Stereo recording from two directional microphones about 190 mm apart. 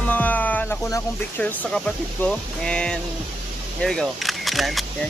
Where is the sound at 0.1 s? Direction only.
10° left (ahead or behind).